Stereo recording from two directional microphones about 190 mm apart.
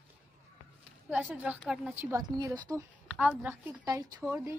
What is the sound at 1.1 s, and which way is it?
Speech, 10° right (ahead or behind).